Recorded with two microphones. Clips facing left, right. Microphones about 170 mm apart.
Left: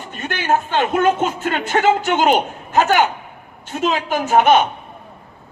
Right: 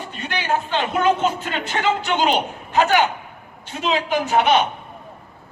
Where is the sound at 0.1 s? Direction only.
50° left (ahead or behind).